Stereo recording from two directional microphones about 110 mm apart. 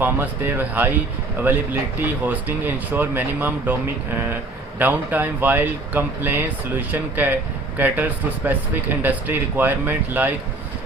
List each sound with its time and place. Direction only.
0.0 s speech: 20° right (ahead or behind)